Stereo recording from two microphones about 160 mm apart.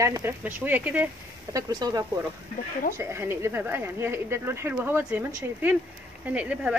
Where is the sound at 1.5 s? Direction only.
20° right (ahead or behind).